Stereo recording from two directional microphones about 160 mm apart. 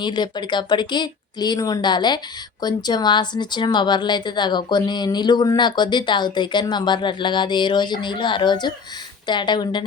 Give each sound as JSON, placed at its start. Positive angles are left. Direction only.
{"t": 0.0, "sound": "speech", "side_deg": 30}